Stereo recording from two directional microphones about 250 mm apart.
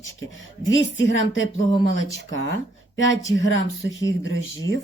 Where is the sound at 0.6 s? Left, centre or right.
Left.